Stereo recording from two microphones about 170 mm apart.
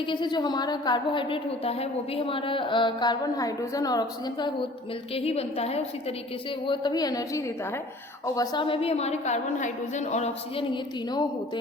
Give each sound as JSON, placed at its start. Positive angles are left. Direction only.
{"t": 0.0, "sound": "a woman's voice", "side_deg": 25}
{"t": 5.1, "sound": "a woman's voice", "side_deg": 35}
{"t": 6.7, "sound": "a woman's voice", "side_deg": 25}